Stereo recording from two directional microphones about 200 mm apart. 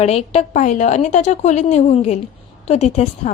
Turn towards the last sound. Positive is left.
turn(degrees=35)  # may be behind; listen again after turning